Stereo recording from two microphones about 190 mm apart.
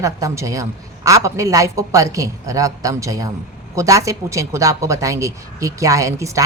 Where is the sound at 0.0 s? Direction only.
15° right (ahead or behind).